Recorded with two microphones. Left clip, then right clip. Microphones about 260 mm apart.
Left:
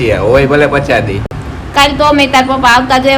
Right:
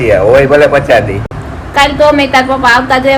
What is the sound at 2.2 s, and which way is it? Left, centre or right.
Speech, centre.